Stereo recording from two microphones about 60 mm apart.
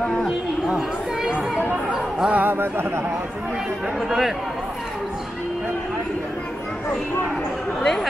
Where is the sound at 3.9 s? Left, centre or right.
Centre.